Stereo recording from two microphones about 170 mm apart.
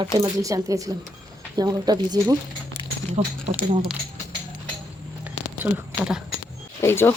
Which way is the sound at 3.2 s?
40° right (ahead or behind).